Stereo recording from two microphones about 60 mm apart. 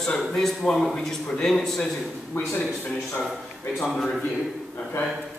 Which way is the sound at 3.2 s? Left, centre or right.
Centre.